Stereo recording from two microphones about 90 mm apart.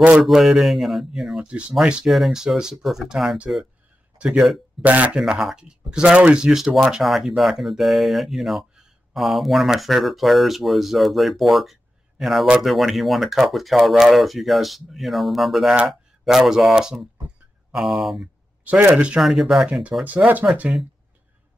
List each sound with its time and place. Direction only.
0.2 s speech: centre (ahead or behind)
4.8 s speech: 15° right (ahead or behind)
5.2 s speech: 5° right (ahead or behind)
18.6 s speech: 20° right (ahead or behind)
19.2 s speech: centre (ahead or behind)